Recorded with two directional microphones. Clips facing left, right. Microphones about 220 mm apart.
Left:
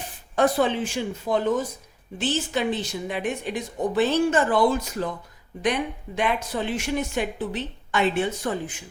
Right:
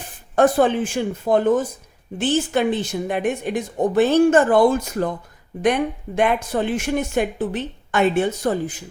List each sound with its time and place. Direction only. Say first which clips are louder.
0.3 s speech: right 5 dB; 50° right (ahead or behind)